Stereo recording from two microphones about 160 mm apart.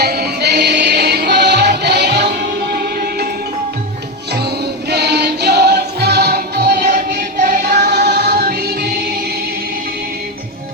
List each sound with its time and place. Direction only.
0.0 s music: 80° right
4.9 s music: 90° right
6.8 s music: 50° right (ahead or behind)
7.7 s music: 90° right